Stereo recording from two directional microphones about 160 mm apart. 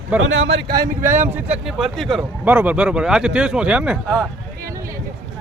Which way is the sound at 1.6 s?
Centre (ahead or behind).